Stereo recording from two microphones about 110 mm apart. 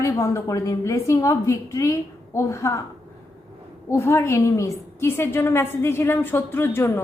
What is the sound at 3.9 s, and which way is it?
A woman's voice, 25° left (ahead or behind).